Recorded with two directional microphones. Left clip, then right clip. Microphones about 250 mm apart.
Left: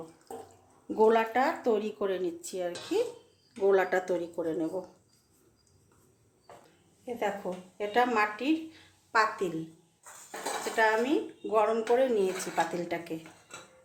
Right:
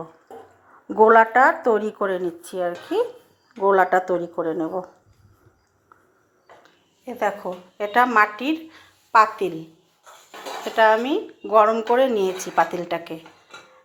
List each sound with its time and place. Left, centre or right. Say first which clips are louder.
0.9 s speech: right 11 dB; centre
7.4 s a woman's voice: right 7 dB; centre
10.8 s speech: right 9 dB; centre